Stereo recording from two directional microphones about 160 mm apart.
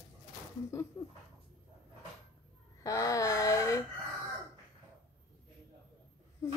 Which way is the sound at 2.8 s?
20° left (ahead or behind).